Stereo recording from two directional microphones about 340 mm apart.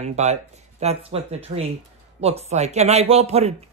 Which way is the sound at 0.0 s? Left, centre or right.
Centre.